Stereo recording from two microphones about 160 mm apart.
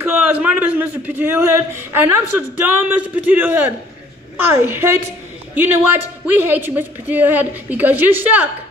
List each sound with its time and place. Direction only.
0.0 s a man's voice: 10° right (ahead or behind)